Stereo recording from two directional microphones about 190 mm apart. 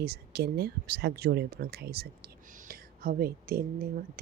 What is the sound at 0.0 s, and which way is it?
Speech, 55° right (ahead or behind).